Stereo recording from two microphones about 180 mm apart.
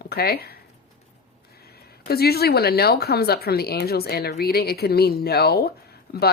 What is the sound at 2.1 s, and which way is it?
Speech, 60° left (ahead or behind).